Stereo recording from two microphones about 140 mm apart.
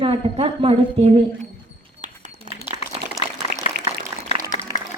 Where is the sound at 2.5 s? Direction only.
65° right (ahead or behind).